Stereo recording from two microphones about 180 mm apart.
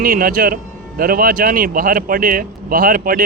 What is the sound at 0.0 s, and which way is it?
Speech, 55° right (ahead or behind).